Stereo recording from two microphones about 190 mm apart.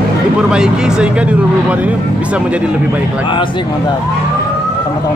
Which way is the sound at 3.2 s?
25° left (ahead or behind).